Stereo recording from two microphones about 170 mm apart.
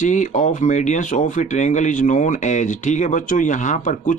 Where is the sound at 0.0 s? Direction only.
45° left (ahead or behind).